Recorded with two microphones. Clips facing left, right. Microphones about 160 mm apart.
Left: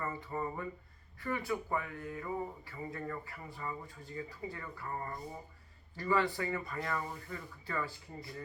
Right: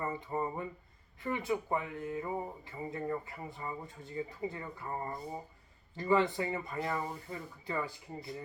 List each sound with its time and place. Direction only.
0.0 s speech: 20° right (ahead or behind)